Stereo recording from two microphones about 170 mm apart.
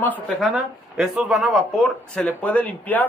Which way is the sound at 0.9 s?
Centre (ahead or behind).